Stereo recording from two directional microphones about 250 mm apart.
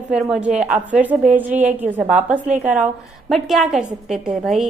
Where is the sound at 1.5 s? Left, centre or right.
Right.